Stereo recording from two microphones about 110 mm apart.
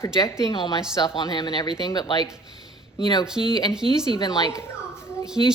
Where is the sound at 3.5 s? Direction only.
40° left (ahead or behind).